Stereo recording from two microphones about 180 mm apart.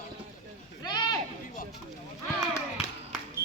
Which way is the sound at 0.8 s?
20° left (ahead or behind).